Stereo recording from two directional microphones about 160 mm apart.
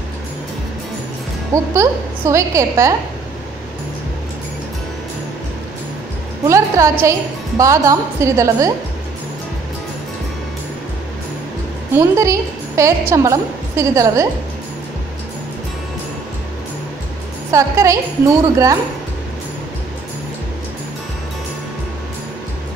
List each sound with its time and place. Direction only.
1.5 s a woman's voice: 20° right (ahead or behind)
6.4 s a woman's voice: 20° right (ahead or behind)
11.9 s a woman's voice: 20° right (ahead or behind)
17.5 s a woman's voice: 20° right (ahead or behind)